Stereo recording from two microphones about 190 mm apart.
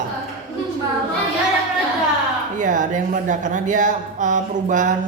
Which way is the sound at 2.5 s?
40° right (ahead or behind).